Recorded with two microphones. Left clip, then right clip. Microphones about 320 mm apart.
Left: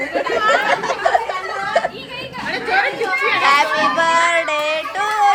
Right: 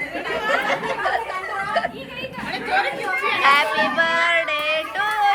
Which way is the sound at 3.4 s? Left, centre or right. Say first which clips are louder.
Left 1 dB; centre.